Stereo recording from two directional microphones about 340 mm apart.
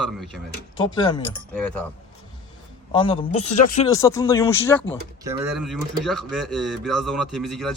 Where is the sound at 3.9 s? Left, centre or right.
Centre.